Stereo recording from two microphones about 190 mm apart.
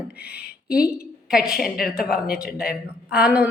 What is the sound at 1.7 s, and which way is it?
Speech, 50° left (ahead or behind).